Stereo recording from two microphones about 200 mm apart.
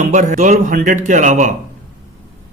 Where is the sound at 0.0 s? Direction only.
35° right (ahead or behind).